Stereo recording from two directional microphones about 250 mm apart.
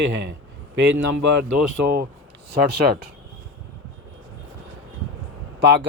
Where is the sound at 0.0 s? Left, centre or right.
Right.